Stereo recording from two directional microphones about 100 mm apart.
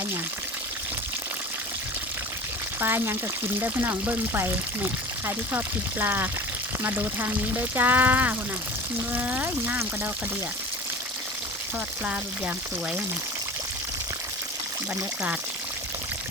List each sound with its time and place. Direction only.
2.8 s speech: 25° right (ahead or behind)
12.0 s speech: 10° right (ahead or behind)